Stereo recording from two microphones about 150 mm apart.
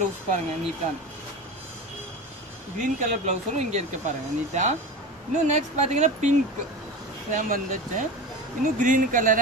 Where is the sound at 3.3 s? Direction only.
50° right (ahead or behind).